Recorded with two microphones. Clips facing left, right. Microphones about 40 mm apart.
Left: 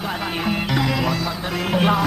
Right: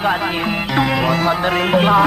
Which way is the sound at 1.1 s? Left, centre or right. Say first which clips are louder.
Right 9 dB; right.